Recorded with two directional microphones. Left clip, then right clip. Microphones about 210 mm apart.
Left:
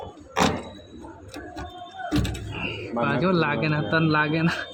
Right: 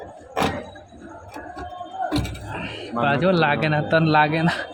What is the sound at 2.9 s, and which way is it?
Speech, 10° right (ahead or behind).